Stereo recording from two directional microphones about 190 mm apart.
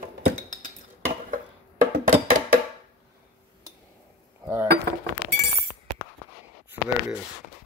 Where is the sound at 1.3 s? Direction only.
45° right (ahead or behind).